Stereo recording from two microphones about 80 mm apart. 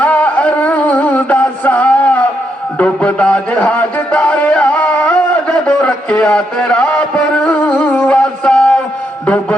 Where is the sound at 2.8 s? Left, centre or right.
Centre.